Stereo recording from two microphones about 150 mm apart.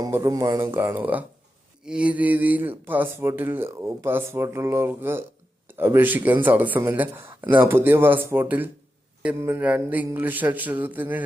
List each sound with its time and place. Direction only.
0.0 s speech: 20° right (ahead or behind)